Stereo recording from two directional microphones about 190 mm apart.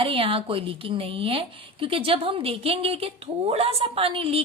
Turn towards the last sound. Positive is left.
turn(degrees=-30)  # may be behind; listen again after turning